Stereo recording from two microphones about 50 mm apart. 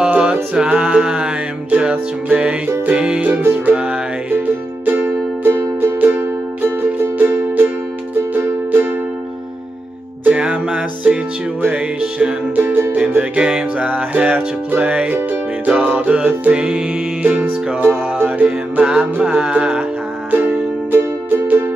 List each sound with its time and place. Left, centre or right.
0.1 s music: right
4.8 s music: right
5.5 s music: right
10.3 s music: right
20.2 s music: right